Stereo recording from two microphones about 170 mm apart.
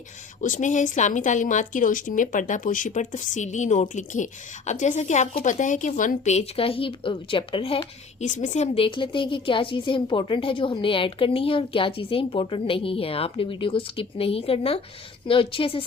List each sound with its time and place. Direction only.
0.4 s a woman's voice: 50° left (ahead or behind)
8.3 s a woman's voice: 45° left (ahead or behind)